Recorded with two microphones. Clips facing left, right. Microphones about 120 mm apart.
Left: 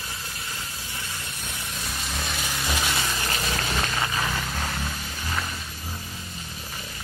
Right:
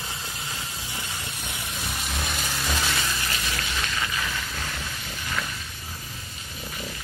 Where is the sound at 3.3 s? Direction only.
40° left (ahead or behind).